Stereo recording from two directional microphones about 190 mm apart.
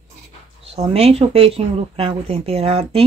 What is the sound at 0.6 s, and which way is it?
Speech, 30° right (ahead or behind).